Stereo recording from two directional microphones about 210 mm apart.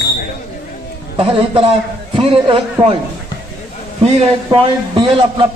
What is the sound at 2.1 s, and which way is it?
Speech, 25° right (ahead or behind).